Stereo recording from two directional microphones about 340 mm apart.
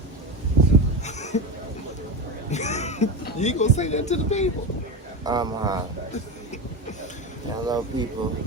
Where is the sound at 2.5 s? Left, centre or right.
Centre.